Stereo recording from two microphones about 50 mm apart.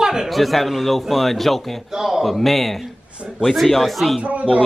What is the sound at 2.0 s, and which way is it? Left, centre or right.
Speech, centre.